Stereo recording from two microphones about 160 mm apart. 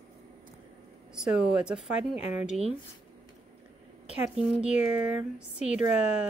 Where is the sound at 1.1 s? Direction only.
5° right (ahead or behind).